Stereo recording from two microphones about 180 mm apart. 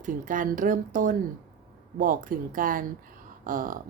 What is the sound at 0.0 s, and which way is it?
A woman's voice, 45° right (ahead or behind).